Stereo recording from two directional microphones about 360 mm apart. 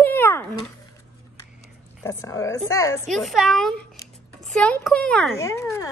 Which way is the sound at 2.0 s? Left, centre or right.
Centre.